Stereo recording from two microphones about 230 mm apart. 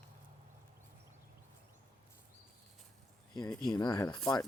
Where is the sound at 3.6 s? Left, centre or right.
Centre.